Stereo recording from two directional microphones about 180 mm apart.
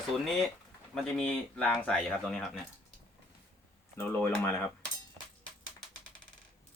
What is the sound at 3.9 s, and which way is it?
Speech, 10° left (ahead or behind).